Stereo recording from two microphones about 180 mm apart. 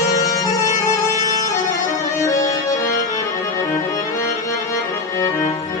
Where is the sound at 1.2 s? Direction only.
20° left (ahead or behind).